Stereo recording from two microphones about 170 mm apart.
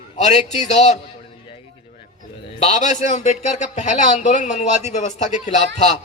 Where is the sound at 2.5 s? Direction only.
40° left (ahead or behind).